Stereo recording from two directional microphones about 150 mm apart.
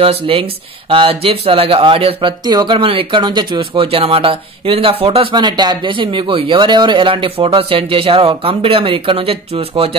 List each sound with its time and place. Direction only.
0.0 s speech: 40° right (ahead or behind)